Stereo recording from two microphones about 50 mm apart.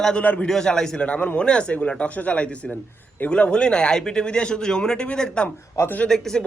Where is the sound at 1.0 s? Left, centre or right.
Left.